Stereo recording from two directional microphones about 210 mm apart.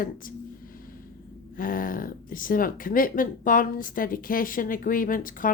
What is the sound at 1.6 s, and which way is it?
Speech, 40° left (ahead or behind).